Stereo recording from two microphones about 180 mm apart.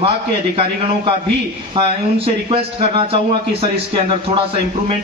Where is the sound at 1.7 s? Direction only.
30° right (ahead or behind).